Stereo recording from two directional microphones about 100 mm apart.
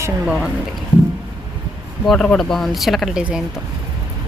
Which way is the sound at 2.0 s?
5° left (ahead or behind).